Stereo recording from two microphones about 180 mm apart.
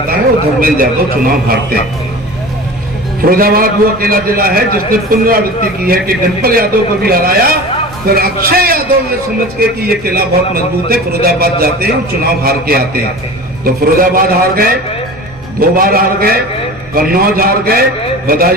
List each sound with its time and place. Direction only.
0.6 s a man's voice: 50° right (ahead or behind)
3.2 s a man's voice: 55° right (ahead or behind)
15.8 s a man's voice: 55° right (ahead or behind)